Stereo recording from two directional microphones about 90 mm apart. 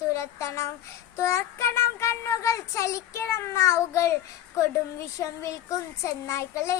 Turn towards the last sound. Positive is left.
turn(degrees=35)  # may be behind; listen again after turning